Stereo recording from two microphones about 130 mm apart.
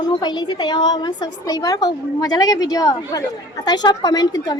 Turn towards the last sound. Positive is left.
turn(degrees=30)  # may be behind; listen again after turning